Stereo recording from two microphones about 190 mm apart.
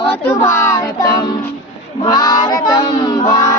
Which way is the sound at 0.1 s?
15° left (ahead or behind).